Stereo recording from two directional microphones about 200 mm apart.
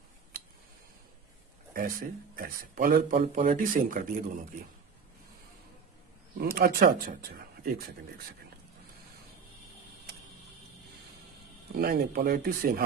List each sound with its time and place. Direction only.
1.7 s speech: 45° right (ahead or behind)
6.4 s speech: 50° right (ahead or behind)
11.8 s speech: 50° right (ahead or behind)